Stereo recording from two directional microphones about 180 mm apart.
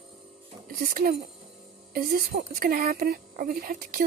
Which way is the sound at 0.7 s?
55° right (ahead or behind).